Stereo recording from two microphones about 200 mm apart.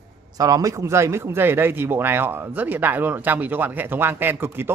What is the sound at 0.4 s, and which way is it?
Speech, 15° right (ahead or behind).